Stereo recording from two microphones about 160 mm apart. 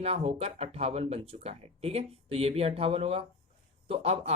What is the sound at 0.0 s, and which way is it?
Speech, 40° right (ahead or behind).